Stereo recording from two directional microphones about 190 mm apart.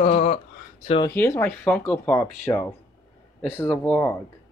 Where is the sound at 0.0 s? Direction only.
35° left (ahead or behind).